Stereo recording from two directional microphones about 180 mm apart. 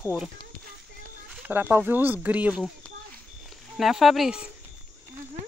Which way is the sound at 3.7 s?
Centre (ahead or behind).